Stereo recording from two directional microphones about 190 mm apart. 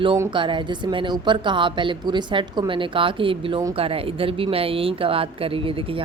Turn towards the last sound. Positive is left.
turn(degrees=-30)  # may be behind; listen again after turning